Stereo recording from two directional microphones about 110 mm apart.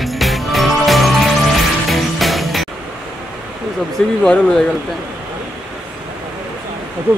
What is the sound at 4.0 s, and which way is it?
Speech, 5° left (ahead or behind).